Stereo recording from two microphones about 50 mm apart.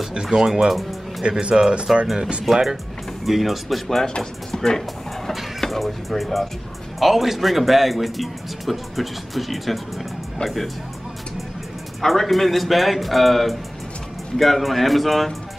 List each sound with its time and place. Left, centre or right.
0.1 s speech: centre
1.4 s speech: centre
2.4 s speech: centre
12.0 s speech: centre